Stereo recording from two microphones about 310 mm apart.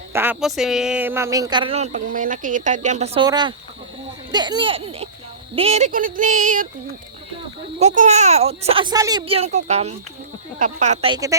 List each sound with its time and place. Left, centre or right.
0.1 s speech: centre; by 6.7 s right
7.8 s speech: right